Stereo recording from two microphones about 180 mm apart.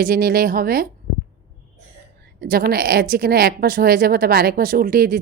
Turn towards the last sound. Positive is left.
turn(degrees=-55)  # may be behind; listen again after turning